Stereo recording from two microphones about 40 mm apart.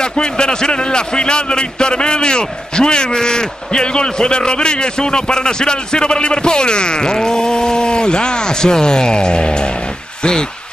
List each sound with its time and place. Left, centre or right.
0.0 s a man's voice: left